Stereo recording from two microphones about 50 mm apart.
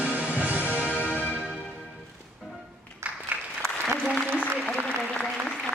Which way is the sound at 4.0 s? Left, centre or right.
Centre.